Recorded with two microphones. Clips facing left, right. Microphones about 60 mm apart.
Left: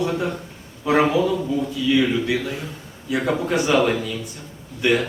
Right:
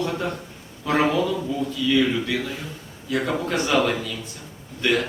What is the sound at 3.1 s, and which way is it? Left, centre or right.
A man's voice, centre.